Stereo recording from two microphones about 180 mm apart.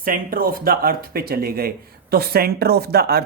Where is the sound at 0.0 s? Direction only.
50° right (ahead or behind).